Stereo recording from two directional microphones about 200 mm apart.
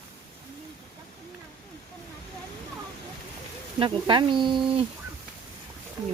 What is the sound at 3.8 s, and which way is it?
Speech, 25° right (ahead or behind).